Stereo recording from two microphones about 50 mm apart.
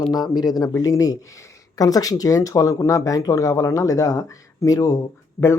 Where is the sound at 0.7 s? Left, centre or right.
Left.